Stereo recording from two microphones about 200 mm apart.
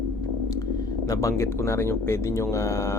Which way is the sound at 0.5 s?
15° left (ahead or behind).